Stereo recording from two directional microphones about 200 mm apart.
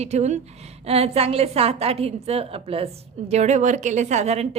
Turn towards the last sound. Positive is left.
turn(degrees=-35)  # may be behind; listen again after turning